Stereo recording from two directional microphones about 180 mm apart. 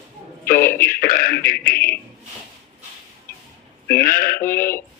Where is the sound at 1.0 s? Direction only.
55° left (ahead or behind).